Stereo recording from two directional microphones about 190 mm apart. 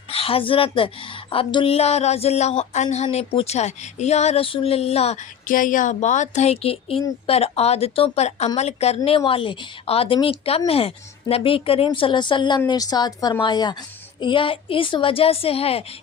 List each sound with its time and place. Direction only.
0.1 s a woman's voice: 30° left (ahead or behind)
1.3 s a sound: 25° left (ahead or behind)
9.0 s speech: 30° left (ahead or behind)